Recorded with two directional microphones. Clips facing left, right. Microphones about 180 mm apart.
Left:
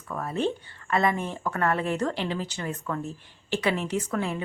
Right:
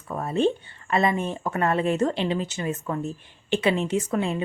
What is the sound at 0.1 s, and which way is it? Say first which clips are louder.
Speech: right 5 dB; 25° right (ahead or behind).